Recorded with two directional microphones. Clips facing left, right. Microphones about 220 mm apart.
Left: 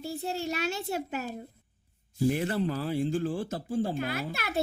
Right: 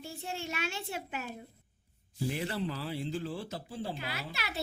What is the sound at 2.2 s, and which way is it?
Speech, 50° left (ahead or behind).